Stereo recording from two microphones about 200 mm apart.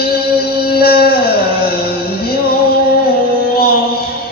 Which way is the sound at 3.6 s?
50° left (ahead or behind).